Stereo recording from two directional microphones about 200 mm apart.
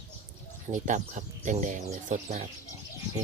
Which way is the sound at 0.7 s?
40° right (ahead or behind).